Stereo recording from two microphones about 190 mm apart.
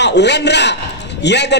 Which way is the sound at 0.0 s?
65° left (ahead or behind).